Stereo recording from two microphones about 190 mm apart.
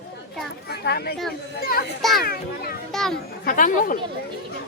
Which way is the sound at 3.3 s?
45° left (ahead or behind).